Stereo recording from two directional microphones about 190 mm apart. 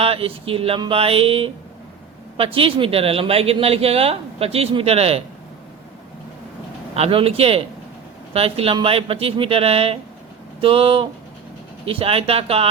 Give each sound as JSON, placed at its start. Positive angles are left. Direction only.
{"t": 0.0, "sound": "speech", "side_deg": -30}
{"t": 6.9, "sound": "speech", "side_deg": -30}